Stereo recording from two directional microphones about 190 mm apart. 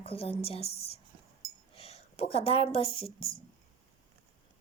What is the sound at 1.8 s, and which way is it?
Speech, 30° left (ahead or behind).